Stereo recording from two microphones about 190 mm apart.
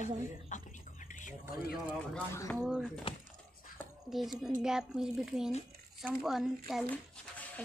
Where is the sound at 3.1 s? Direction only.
30° left (ahead or behind).